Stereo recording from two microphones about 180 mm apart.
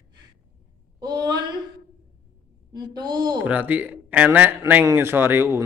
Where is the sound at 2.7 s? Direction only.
25° right (ahead or behind).